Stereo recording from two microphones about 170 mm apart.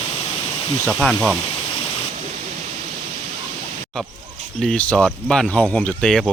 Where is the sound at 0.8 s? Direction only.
5° left (ahead or behind).